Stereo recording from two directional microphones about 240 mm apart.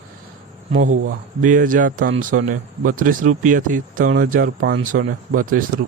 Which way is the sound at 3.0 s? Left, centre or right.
Right.